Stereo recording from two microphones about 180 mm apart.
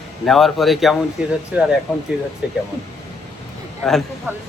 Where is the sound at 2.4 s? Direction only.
5° right (ahead or behind).